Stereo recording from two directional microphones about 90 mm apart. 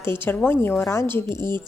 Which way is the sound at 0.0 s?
25° left (ahead or behind).